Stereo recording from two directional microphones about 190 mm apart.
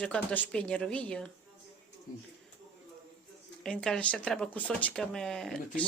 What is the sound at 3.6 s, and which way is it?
A woman's voice, 5° left (ahead or behind).